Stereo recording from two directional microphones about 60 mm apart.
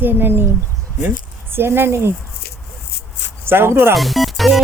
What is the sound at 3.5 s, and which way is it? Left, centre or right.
Speech, right.